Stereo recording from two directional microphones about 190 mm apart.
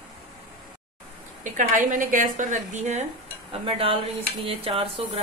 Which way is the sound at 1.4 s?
45° right (ahead or behind).